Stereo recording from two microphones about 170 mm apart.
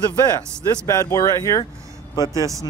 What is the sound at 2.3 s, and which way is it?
Speech, 20° right (ahead or behind).